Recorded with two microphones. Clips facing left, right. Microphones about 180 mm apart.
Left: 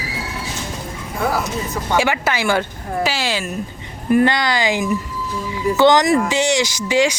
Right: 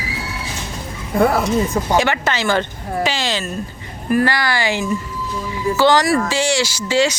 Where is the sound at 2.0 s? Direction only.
10° left (ahead or behind).